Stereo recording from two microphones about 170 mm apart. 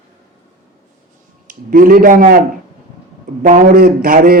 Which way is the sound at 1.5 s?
55° right (ahead or behind).